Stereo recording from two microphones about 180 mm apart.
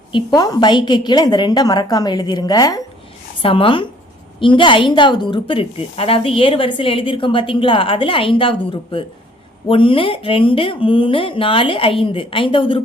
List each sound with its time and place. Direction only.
0.1 s a woman's voice: 20° left (ahead or behind)